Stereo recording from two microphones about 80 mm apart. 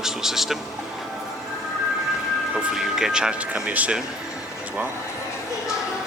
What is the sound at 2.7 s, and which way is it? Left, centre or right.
Speech, centre.